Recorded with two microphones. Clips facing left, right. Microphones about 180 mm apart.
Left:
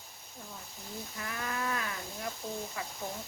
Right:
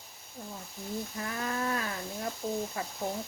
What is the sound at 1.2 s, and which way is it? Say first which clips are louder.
Speech: right 2 dB; 30° right (ahead or behind).